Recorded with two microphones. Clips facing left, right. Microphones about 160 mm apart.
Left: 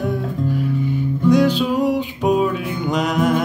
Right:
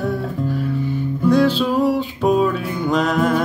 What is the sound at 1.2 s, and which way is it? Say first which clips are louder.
Music: even; 15° left (ahead or behind).